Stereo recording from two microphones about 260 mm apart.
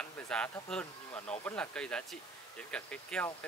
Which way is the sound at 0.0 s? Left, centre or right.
Centre.